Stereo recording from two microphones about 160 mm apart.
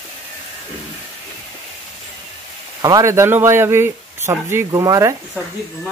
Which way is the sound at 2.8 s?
20° right (ahead or behind).